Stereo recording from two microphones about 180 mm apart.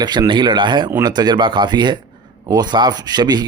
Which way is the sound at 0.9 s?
15° right (ahead or behind).